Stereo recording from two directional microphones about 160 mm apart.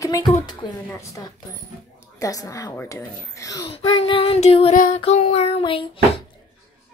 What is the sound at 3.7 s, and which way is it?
Child singing, 35° left (ahead or behind).